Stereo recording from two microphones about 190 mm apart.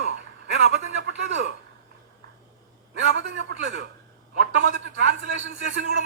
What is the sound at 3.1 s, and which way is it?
Speech, 70° right (ahead or behind).